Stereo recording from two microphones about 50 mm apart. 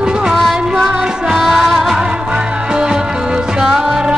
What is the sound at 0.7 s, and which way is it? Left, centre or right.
Music, centre.